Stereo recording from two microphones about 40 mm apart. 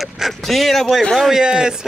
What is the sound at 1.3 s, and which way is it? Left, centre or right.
Speech, centre.